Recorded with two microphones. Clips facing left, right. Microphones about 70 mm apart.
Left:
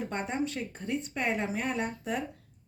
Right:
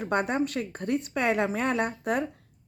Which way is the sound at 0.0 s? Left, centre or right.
Right.